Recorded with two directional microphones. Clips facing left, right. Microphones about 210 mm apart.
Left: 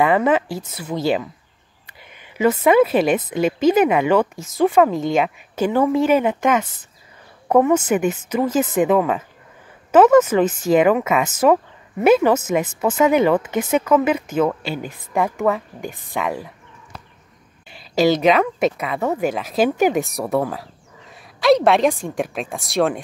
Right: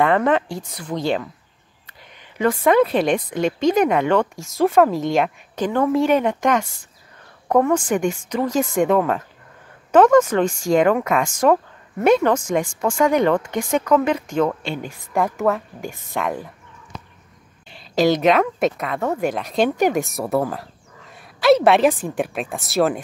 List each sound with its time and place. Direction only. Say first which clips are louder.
0.0 s a woman's voice: left 1 dB; 5° left (ahead or behind)
17.6 s a woman's voice: left 1 dB; 5° left (ahead or behind)